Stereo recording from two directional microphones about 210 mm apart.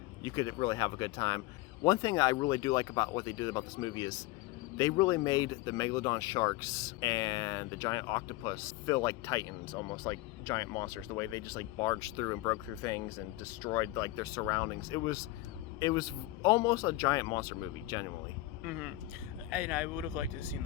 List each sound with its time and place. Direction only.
0.2 s speech: 20° left (ahead or behind)
18.6 s speech: 5° right (ahead or behind)